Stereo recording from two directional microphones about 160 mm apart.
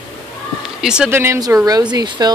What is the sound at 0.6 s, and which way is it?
Speech, 5° right (ahead or behind).